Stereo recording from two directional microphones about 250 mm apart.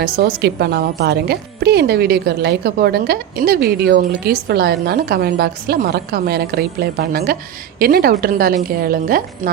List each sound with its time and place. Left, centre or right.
0.0 s a woman's voice: right